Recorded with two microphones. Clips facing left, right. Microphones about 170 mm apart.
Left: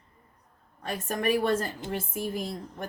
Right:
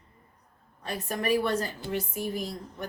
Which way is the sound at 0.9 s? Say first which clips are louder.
Left 1 dB; 45° left (ahead or behind).